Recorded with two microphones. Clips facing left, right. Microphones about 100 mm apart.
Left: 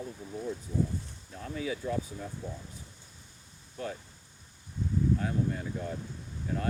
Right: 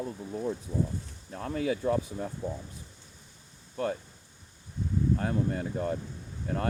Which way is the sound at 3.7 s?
50° right (ahead or behind).